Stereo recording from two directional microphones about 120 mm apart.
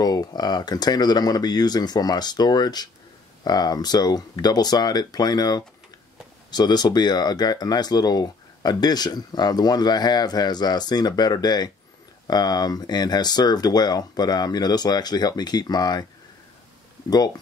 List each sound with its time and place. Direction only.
0.0 s speech: 35° left (ahead or behind)